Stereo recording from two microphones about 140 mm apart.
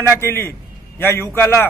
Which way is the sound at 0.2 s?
15° left (ahead or behind).